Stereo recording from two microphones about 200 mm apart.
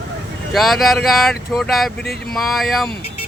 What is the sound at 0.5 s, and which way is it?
A man's voice, centre (ahead or behind).